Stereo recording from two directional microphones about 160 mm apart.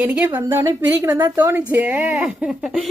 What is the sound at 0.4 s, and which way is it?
A woman's voice, 15° right (ahead or behind).